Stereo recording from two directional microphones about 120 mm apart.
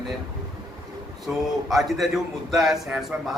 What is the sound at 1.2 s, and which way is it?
A man's voice, centre (ahead or behind).